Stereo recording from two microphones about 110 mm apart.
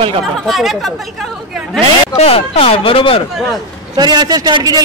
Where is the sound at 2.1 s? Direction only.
65° left (ahead or behind).